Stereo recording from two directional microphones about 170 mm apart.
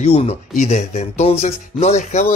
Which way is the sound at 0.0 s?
35° left (ahead or behind).